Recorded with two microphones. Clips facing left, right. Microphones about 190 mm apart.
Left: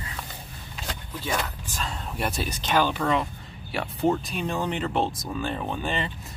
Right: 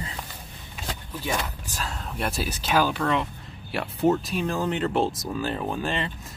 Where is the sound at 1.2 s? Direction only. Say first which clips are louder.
Even; 10° right (ahead or behind).